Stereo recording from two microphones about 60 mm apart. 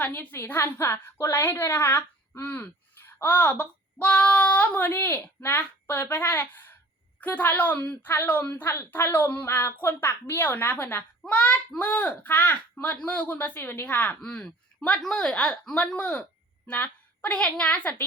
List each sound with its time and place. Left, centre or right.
0.0 s speech: left
4.8 s speech: left
11.3 s a woman's voice: left